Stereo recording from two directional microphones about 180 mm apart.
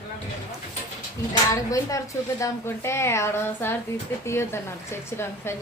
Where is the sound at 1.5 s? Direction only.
20° left (ahead or behind).